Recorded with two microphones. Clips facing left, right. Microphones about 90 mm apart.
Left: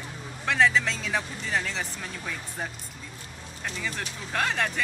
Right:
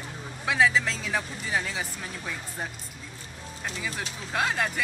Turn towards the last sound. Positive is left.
turn(degrees=-5)  # may be behind; listen again after turning